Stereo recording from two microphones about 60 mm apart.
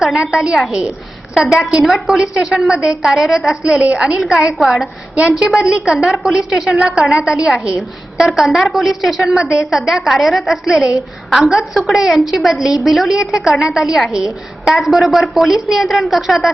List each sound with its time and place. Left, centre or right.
0.0 s a woman's voice: centre
3.6 s a woman's voice: centre
4.2 s a woman's voice: centre
5.7 s a woman's voice: centre
8.4 s a woman's voice: centre
10.7 s a woman's voice: centre